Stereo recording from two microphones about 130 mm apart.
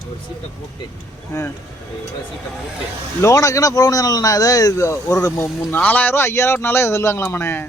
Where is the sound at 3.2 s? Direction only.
25° left (ahead or behind).